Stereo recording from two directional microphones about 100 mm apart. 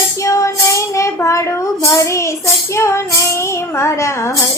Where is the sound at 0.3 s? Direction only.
30° left (ahead or behind).